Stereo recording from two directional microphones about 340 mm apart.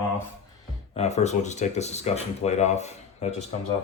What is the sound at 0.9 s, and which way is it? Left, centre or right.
Speech, centre.